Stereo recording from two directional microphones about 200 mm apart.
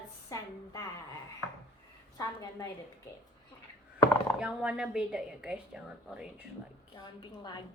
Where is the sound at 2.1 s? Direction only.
15° left (ahead or behind).